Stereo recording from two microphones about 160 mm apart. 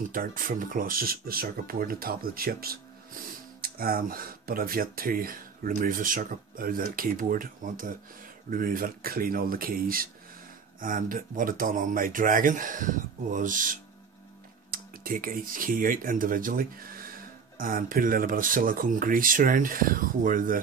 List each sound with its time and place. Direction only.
0.1 s speech: 60° right (ahead or behind)